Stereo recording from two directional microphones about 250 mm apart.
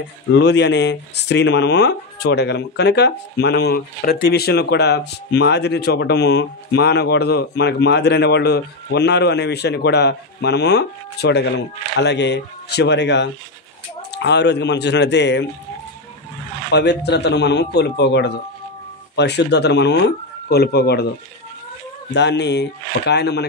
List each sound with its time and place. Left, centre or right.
0.3 s a man's voice: left
16.7 s a man's voice: left
22.1 s a man's voice: left